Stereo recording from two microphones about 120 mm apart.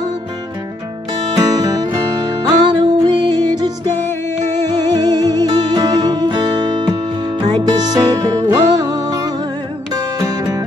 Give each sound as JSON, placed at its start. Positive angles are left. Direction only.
{"t": 1.3, "sound": "music", "side_deg": -30}
{"t": 4.9, "sound": "music", "side_deg": -35}